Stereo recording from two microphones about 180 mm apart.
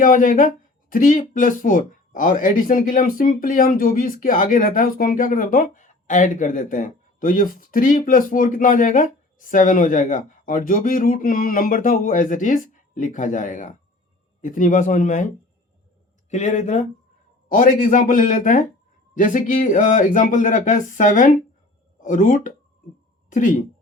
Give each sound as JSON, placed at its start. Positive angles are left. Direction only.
{"t": 0.0, "sound": "speech", "side_deg": 50}
{"t": 16.3, "sound": "speech", "side_deg": 40}